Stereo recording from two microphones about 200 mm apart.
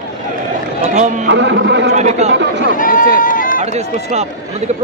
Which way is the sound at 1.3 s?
60° right (ahead or behind).